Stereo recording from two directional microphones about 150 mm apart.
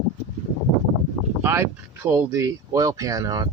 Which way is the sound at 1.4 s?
20° right (ahead or behind).